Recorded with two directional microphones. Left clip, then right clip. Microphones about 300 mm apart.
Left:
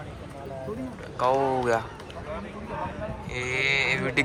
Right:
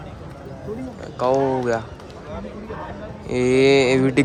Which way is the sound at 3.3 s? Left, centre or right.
Centre.